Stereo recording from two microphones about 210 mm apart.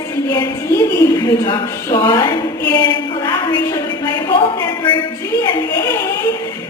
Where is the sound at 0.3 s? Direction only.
15° left (ahead or behind).